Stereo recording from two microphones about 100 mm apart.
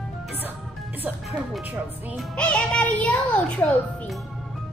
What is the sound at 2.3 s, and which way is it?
A child's voice, 10° left (ahead or behind).